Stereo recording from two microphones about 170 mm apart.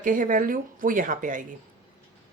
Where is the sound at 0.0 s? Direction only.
55° right (ahead or behind).